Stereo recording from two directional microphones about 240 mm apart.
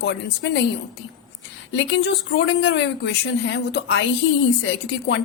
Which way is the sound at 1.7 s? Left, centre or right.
Left.